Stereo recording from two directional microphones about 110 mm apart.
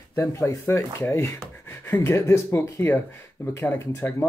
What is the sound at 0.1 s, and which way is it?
Speech, 25° left (ahead or behind).